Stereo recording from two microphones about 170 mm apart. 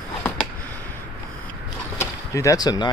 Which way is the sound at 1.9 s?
20° left (ahead or behind).